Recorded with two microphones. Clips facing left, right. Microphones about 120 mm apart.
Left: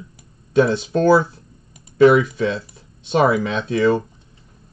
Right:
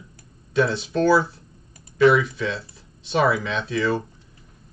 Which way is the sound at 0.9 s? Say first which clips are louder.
Left 4 dB; 55° left (ahead or behind).